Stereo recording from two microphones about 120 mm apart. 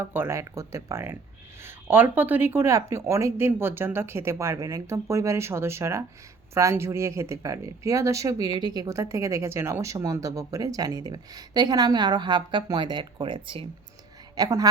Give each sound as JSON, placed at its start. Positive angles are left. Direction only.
{"t": 0.0, "sound": "speech", "side_deg": -20}
{"t": 14.3, "sound": "a woman's voice", "side_deg": -30}